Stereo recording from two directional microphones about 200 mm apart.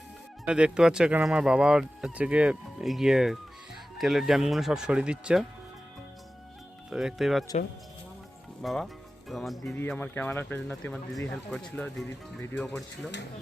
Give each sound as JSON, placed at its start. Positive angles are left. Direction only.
{"t": 0.4, "sound": "speech", "side_deg": -5}
{"t": 6.9, "sound": "speech", "side_deg": 0}
{"t": 8.6, "sound": "speech", "side_deg": 0}